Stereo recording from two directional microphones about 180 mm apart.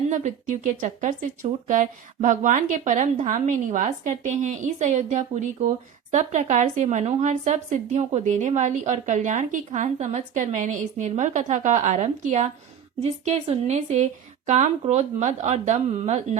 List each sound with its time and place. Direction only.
0.1 s a woman's voice: 40° right (ahead or behind)